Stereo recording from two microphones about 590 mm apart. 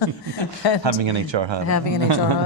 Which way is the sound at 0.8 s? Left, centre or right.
Right.